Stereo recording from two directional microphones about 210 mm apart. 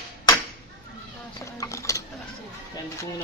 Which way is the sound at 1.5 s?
15° left (ahead or behind).